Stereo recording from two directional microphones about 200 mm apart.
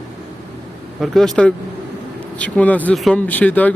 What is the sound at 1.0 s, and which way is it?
Speech, centre (ahead or behind).